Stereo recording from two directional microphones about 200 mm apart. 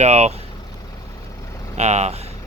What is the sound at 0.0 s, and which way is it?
Speech, 35° right (ahead or behind).